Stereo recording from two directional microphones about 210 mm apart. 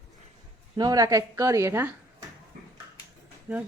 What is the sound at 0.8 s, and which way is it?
Speech, 15° right (ahead or behind).